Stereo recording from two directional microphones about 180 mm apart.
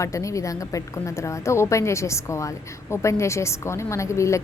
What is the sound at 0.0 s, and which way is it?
A woman's voice, 15° left (ahead or behind).